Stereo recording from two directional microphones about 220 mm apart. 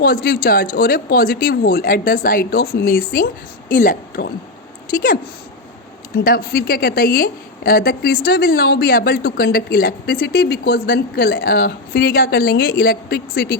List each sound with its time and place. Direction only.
0.0 s a woman's voice: 45° left (ahead or behind)
6.2 s a woman's voice: 45° left (ahead or behind)